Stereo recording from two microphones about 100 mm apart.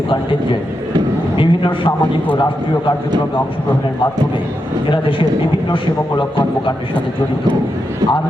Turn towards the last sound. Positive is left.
turn(degrees=55)  # may be behind; listen again after turning